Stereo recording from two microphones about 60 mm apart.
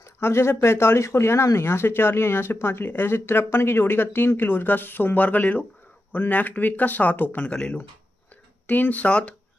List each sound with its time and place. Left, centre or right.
0.0 s speech: left
7.5 s speech: centre
8.6 s speech: left